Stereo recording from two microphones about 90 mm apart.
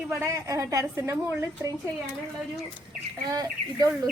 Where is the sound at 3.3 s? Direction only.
45° right (ahead or behind).